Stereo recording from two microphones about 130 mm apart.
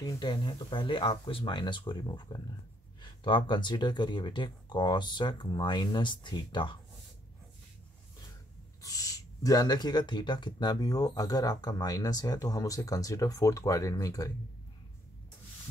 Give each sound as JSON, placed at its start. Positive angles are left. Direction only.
{"t": 0.0, "sound": "speech", "side_deg": 35}
{"t": 8.8, "sound": "speech", "side_deg": 25}